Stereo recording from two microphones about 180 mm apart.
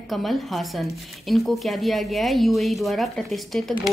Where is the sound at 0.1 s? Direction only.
Centre (ahead or behind).